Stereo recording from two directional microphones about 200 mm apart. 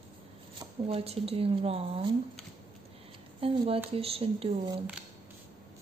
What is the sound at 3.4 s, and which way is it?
Speech, 30° right (ahead or behind).